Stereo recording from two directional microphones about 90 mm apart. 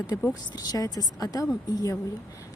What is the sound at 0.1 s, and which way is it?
Speech, 40° left (ahead or behind).